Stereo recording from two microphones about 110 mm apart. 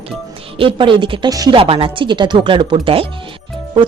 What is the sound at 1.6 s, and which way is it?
Speech, 55° right (ahead or behind).